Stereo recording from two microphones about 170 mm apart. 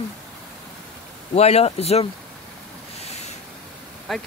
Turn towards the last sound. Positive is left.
turn(degrees=0)  # may be behind; listen again after turning